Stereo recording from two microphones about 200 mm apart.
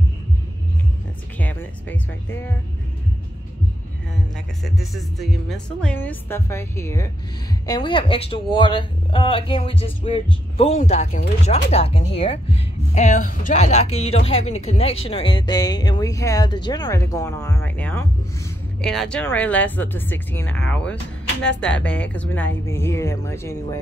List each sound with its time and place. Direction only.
1.4 s music: 10° left (ahead or behind)
4.6 s a woman's voice: centre (ahead or behind)